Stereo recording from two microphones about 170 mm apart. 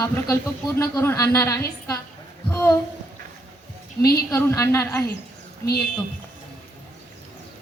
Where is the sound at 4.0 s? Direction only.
65° left (ahead or behind).